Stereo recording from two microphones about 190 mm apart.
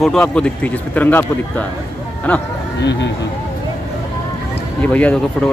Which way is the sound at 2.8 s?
65° left (ahead or behind).